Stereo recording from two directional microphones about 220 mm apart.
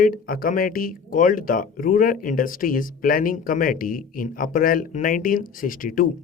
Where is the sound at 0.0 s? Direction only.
40° left (ahead or behind).